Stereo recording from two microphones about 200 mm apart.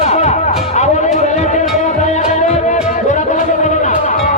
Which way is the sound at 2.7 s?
35° left (ahead or behind).